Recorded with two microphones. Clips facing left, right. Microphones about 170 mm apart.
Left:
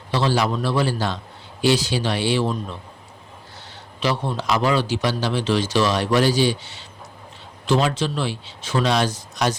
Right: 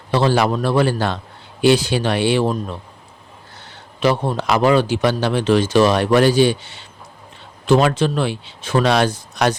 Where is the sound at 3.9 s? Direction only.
50° right (ahead or behind).